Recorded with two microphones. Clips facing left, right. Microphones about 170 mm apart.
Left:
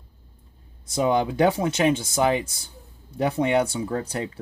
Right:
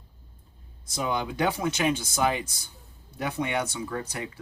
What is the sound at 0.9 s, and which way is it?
Speech, 25° left (ahead or behind).